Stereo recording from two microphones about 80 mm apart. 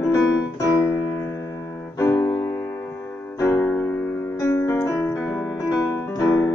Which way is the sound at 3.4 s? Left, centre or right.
Left.